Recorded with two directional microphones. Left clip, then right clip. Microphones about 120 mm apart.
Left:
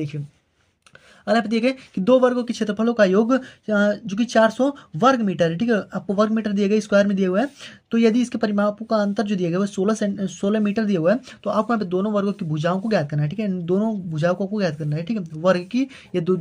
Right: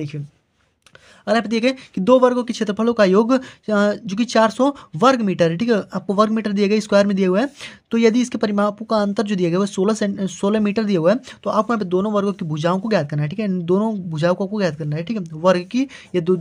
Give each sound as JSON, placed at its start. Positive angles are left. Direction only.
{"t": 1.2, "sound": "speech", "side_deg": -45}